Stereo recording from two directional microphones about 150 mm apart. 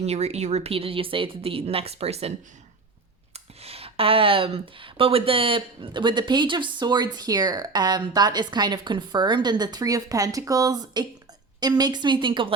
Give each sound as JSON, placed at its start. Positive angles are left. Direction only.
{"t": 0.0, "sound": "speech", "side_deg": -45}
{"t": 3.3, "sound": "a woman's voice", "side_deg": -40}